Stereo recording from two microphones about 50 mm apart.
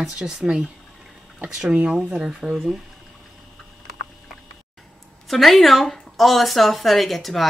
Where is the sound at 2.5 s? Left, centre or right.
Centre.